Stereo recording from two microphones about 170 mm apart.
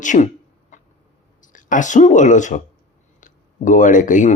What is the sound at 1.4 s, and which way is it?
Speech, 50° left (ahead or behind).